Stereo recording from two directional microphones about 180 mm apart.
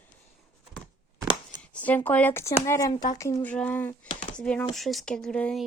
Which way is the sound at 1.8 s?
10° left (ahead or behind).